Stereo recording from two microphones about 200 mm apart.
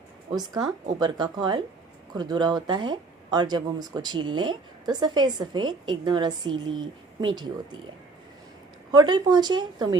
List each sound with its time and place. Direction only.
0.3 s speech: 20° right (ahead or behind)
8.9 s speech: 20° right (ahead or behind)